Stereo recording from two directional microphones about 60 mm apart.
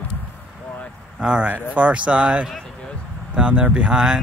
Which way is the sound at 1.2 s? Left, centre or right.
Centre.